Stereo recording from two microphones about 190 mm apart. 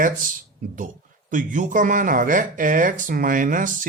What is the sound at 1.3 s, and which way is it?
Speech, 45° right (ahead or behind).